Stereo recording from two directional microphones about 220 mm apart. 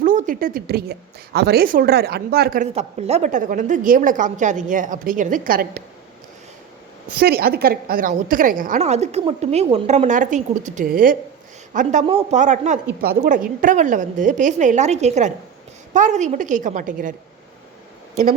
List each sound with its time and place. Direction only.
0.0 s a woman's voice: 35° right (ahead or behind)
2.7 s a woman's voice: 30° right (ahead or behind)
7.2 s a woman's voice: 45° right (ahead or behind)